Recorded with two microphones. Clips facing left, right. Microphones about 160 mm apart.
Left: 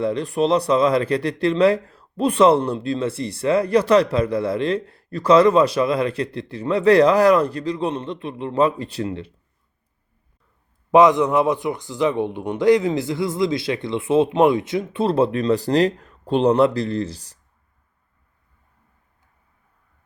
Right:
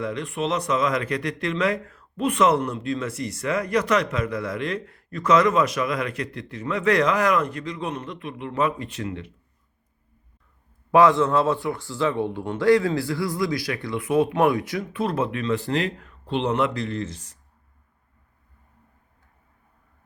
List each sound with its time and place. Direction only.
0.0 s speech: 35° left (ahead or behind)
10.9 s a man's voice: 15° left (ahead or behind); by 17.3 s 35° left (ahead or behind)